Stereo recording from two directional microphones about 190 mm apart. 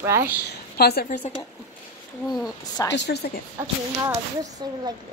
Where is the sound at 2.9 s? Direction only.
65° left (ahead or behind).